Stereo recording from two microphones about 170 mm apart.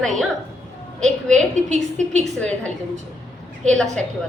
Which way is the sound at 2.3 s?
5° left (ahead or behind).